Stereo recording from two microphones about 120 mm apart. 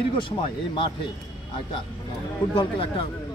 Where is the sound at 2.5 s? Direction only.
45° left (ahead or behind).